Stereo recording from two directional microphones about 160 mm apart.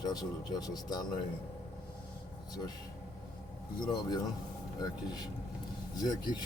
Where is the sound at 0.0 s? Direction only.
25° left (ahead or behind).